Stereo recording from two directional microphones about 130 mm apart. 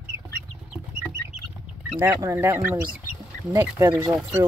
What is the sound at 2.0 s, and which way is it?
Speech, 20° right (ahead or behind).